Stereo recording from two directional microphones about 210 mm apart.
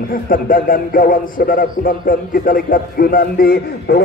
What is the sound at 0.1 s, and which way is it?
A man's voice, 40° left (ahead or behind).